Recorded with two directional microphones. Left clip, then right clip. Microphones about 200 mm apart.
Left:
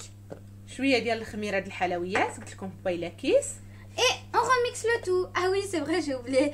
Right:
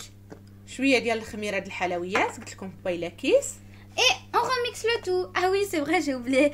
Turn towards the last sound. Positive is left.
turn(degrees=-45)  # may be behind; listen again after turning